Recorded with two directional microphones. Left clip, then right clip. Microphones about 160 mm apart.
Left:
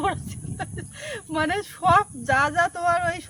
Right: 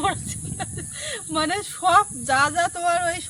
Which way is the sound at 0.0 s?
10° left (ahead or behind).